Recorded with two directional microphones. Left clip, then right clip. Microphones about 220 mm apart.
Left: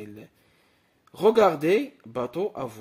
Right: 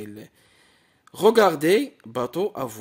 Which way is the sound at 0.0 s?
35° right (ahead or behind).